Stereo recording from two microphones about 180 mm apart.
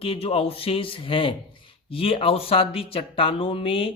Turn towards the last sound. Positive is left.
turn(degrees=30)  # may be behind; listen again after turning